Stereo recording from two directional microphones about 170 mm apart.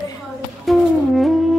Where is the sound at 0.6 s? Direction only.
Centre (ahead or behind).